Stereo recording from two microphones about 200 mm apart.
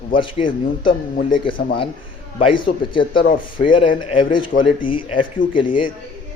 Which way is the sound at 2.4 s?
25° left (ahead or behind).